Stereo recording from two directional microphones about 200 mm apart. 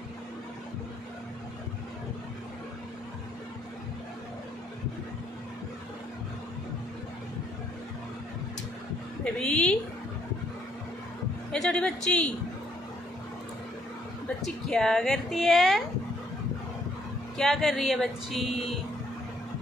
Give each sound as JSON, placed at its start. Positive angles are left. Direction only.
{"t": 9.2, "sound": "a sound", "side_deg": 5}
{"t": 11.5, "sound": "a woman's voice", "side_deg": 5}
{"t": 14.4, "sound": "a woman's voice", "side_deg": 0}
{"t": 17.4, "sound": "a woman's voice", "side_deg": 0}